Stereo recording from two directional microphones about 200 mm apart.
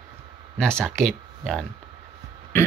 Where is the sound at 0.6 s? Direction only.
5° left (ahead or behind).